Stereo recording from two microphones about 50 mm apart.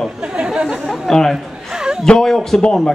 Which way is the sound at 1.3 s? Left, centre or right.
Centre.